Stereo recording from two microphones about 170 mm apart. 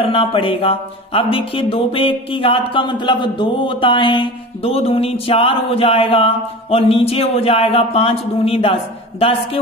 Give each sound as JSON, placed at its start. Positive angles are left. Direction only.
{"t": 0.0, "sound": "speech", "side_deg": 35}